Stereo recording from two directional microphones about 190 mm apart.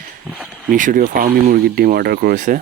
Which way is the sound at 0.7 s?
45° right (ahead or behind).